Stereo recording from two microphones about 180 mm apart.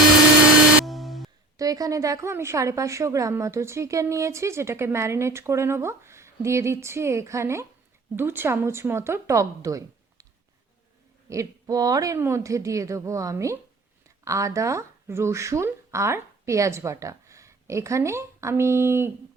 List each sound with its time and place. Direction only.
0.9 s a sound: centre (ahead or behind)
1.5 s a woman's voice: 20° right (ahead or behind)
11.3 s a woman's voice: 20° right (ahead or behind)